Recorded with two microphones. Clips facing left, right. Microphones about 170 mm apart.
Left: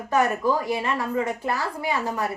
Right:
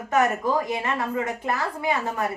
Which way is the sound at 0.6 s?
20° right (ahead or behind).